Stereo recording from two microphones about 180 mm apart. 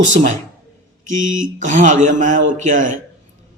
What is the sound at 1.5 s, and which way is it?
A man's voice, 45° right (ahead or behind).